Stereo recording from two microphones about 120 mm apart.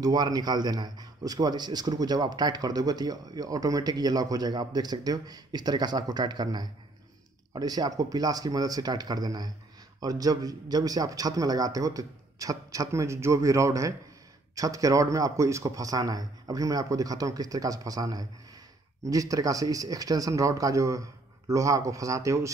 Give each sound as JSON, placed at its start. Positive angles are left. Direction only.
{"t": 0.0, "sound": "a man's voice", "side_deg": -30}